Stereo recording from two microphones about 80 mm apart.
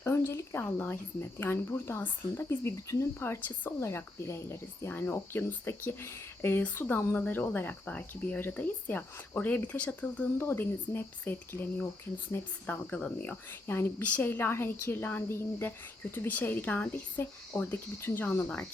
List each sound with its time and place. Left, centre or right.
0.0 s speech: left; by 10.2 s centre
10.3 s speech: left
12.9 s speech: centre
13.5 s speech: left